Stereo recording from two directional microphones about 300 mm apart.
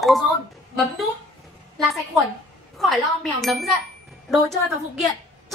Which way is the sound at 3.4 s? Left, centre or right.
Centre.